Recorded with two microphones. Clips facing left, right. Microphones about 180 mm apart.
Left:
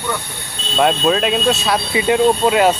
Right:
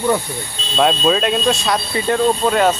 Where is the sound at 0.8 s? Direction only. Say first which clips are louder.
Even; 5° left (ahead or behind).